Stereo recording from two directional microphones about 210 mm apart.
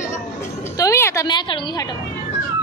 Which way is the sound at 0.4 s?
15° left (ahead or behind).